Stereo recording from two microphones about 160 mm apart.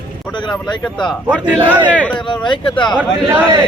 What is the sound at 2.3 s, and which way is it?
Speech, 30° left (ahead or behind).